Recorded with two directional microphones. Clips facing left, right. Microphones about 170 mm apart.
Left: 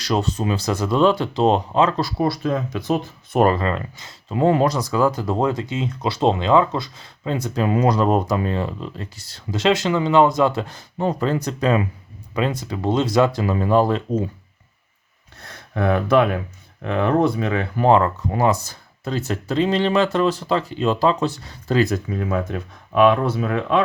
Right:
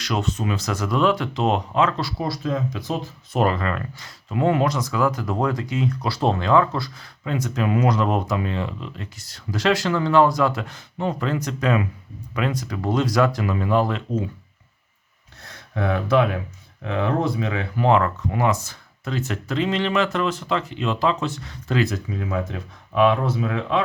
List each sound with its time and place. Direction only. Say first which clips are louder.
0.0 s speech: left 3 dB; 35° left (ahead or behind)
2.2 s speech: left 3 dB; 60° left (ahead or behind)
3.6 s speech: left 3 dB; 25° left (ahead or behind)
15.7 s speech: left 3 dB; 55° left (ahead or behind)
17.8 s speech: left 3 dB; 35° left (ahead or behind); by 23.8 s 55° left (ahead or behind)